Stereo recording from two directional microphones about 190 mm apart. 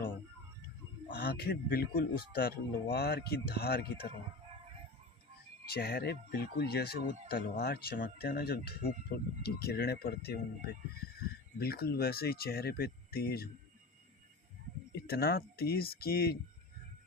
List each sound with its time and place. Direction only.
1.1 s speech: 55° left (ahead or behind)
5.6 s speech: 55° left (ahead or behind)
11.6 s speech: 55° left (ahead or behind)
15.0 s speech: 55° left (ahead or behind)